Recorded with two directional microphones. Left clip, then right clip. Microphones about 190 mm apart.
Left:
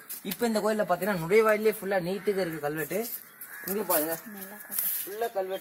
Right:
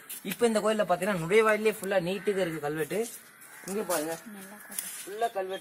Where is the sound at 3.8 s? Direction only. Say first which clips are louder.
Left 2 dB; 35° left (ahead or behind).